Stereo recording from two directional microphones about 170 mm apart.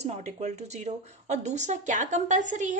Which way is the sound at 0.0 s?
40° right (ahead or behind).